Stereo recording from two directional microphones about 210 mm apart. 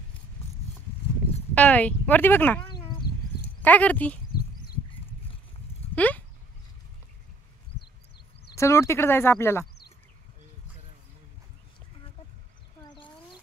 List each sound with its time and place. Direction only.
1.5 s speech: 5° left (ahead or behind)
3.6 s speech: 5° left (ahead or behind)
5.9 s sheep: 10° left (ahead or behind)
8.5 s speech: 15° left (ahead or behind)
12.8 s a sound: 20° left (ahead or behind)